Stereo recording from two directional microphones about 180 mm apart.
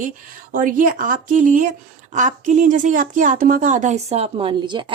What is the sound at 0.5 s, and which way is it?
A woman's voice, 50° right (ahead or behind).